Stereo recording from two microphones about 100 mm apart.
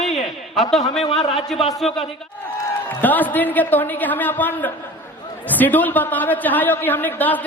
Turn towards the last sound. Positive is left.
turn(degrees=15)  # may be behind; listen again after turning